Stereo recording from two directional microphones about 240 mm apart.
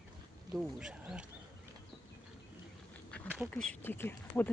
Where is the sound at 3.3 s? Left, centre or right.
Centre.